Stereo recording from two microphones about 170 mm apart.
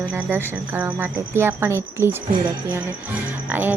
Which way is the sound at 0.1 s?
10° right (ahead or behind).